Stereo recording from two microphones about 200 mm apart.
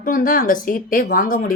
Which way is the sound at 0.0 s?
45° left (ahead or behind).